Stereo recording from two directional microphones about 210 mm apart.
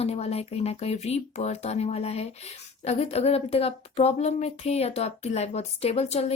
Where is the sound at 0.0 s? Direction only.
30° left (ahead or behind).